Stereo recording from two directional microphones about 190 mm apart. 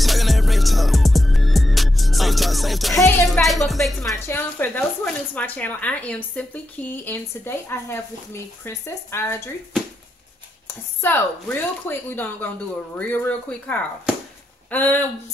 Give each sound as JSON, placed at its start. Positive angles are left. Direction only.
{"t": 0.0, "sound": "music", "side_deg": 0}
{"t": 3.0, "sound": "music", "side_deg": 15}
{"t": 3.4, "sound": "music", "side_deg": 0}
{"t": 4.3, "sound": "speech", "side_deg": 10}
{"t": 11.0, "sound": "speech", "side_deg": 10}